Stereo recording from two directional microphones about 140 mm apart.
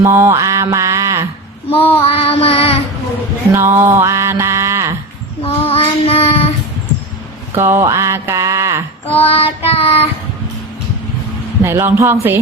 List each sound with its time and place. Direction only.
0.0 s mantra: 20° right (ahead or behind)
1.7 s child singing: 40° left (ahead or behind)
3.5 s mantra: 20° right (ahead or behind)
5.4 s child singing: 45° left (ahead or behind)
7.5 s mantra: 20° right (ahead or behind)
9.1 s child singing: 45° left (ahead or behind)
11.6 s mantra: 20° right (ahead or behind)